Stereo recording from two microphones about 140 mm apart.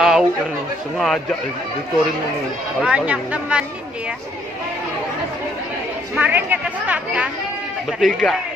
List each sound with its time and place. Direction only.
0.0 s chatter: 5° right (ahead or behind)
0.9 s speech: 5° left (ahead or behind)
2.8 s a woman's voice: 10° right (ahead or behind)
6.1 s a woman's voice: 10° right (ahead or behind)
8.0 s speech: centre (ahead or behind)